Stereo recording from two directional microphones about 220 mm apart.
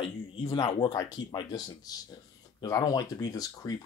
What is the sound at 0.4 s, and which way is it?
Speech, 25° left (ahead or behind).